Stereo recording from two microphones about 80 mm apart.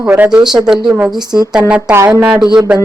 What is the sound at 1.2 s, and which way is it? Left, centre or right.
Speech, right.